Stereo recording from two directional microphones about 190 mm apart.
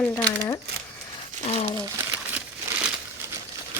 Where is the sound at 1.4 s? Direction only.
35° left (ahead or behind).